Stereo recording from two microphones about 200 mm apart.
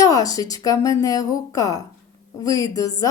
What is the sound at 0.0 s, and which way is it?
Speech, 15° left (ahead or behind).